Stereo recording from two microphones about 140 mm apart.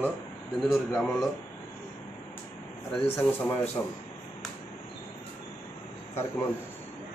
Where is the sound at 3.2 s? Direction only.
15° left (ahead or behind).